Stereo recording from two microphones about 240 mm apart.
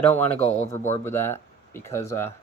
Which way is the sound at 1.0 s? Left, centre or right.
Centre.